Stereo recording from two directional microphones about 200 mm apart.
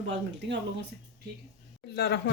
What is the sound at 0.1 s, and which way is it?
Speech, 65° right (ahead or behind).